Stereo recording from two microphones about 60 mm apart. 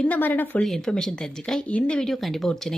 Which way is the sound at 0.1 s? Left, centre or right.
Left.